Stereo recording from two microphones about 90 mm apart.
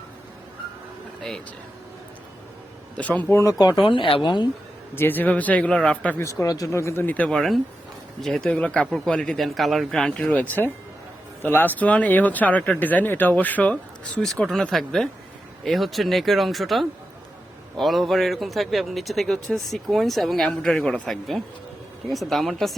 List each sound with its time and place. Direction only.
3.0 s speech: 15° left (ahead or behind)
3.8 s speech: 70° left (ahead or behind)
4.9 s speech: 20° left (ahead or behind)
6.1 s speech: 35° left (ahead or behind)
7.3 s a man's voice: 5° left (ahead or behind)
10.3 s a man's voice: 20° left (ahead or behind)
21.1 s a man's voice: centre (ahead or behind)